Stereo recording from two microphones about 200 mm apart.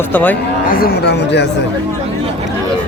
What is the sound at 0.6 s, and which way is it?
Speech, 45° left (ahead or behind).